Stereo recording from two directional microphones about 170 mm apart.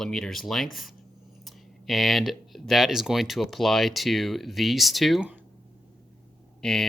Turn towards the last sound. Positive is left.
turn(degrees=5)  # may be behind; listen again after turning